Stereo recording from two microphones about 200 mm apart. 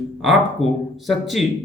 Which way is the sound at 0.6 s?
30° left (ahead or behind).